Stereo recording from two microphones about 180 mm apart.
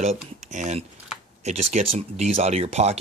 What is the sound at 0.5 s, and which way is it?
Speech, 40° right (ahead or behind).